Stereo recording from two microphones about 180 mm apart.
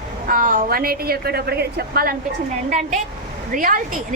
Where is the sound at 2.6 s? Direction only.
45° right (ahead or behind).